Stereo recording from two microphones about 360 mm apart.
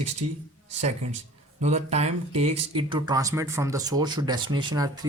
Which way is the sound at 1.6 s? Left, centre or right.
Centre.